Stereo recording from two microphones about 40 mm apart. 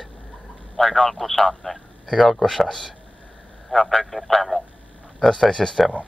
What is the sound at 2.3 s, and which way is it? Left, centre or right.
Speech, centre.